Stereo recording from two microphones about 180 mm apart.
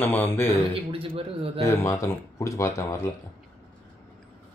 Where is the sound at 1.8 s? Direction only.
15° left (ahead or behind).